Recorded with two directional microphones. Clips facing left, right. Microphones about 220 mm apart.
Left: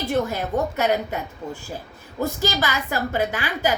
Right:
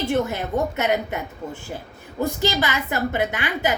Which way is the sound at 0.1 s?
20° right (ahead or behind).